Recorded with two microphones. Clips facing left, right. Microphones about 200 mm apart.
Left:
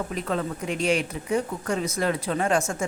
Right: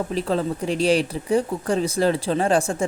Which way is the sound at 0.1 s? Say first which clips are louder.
Right 5 dB; 30° right (ahead or behind).